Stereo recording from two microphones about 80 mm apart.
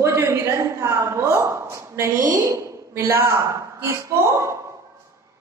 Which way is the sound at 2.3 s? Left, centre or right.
Right.